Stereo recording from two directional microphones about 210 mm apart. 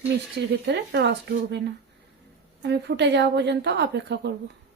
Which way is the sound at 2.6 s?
55° right (ahead or behind).